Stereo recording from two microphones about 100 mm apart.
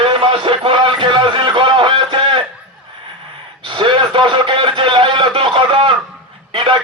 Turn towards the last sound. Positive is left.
turn(degrees=-60)  # may be behind; listen again after turning